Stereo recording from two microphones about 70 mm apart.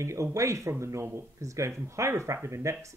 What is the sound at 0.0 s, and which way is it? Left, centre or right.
Speech, right.